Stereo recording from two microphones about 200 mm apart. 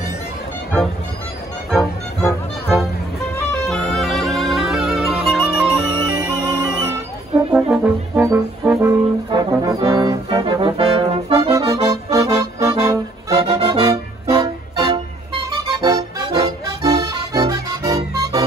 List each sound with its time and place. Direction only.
3.6 s music: centre (ahead or behind)
6.0 s music: 15° right (ahead or behind)
7.5 s brass instrument: 5° right (ahead or behind); by 11.3 s 25° right (ahead or behind)
11.3 s accordion: 15° right (ahead or behind)
15.8 s music: 15° right (ahead or behind)